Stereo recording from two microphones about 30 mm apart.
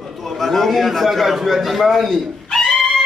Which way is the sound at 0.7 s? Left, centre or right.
Centre.